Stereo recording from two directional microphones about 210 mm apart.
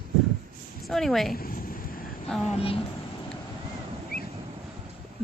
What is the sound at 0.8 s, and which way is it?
Speech, centre (ahead or behind).